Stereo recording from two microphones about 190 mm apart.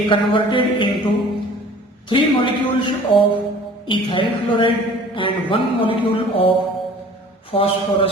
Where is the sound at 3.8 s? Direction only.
25° left (ahead or behind).